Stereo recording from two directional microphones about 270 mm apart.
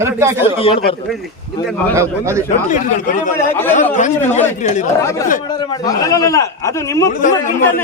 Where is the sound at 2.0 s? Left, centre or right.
Centre.